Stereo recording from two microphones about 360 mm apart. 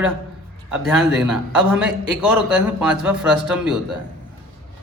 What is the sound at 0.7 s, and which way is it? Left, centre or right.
A man's voice, centre.